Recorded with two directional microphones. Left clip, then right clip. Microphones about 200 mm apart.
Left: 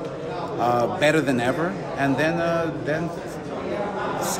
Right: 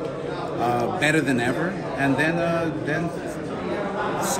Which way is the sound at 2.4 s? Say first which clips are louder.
Left 1 dB; 5° left (ahead or behind).